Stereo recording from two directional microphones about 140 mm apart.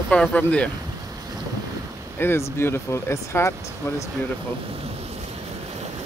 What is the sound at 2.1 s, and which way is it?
Speech, 15° left (ahead or behind).